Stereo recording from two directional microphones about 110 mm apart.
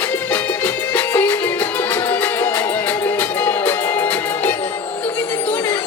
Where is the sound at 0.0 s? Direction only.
15° left (ahead or behind).